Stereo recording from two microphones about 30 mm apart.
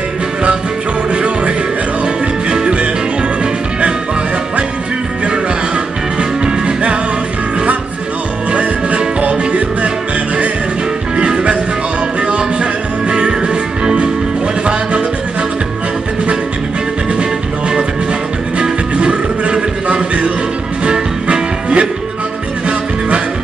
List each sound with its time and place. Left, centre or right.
1.1 s music: right
2.5 s music: right
6.4 s music: right
8.5 s music: right
11.1 s music: right
17.2 s music: right